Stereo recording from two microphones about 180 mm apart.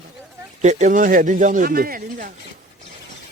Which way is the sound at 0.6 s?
40° right (ahead or behind).